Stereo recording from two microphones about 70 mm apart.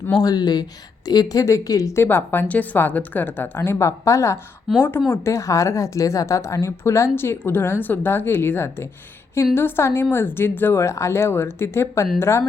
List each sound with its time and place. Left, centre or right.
0.2 s speech: left
1.0 s speech: left
1.9 s a woman's voice: left
4.8 s a woman's voice: left
5.3 s a woman's voice: left